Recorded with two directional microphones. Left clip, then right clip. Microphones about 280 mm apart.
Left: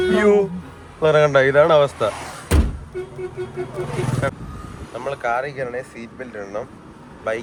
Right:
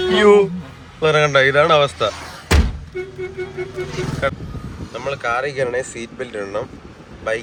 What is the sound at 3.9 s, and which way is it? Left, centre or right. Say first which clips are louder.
Speech: even; left.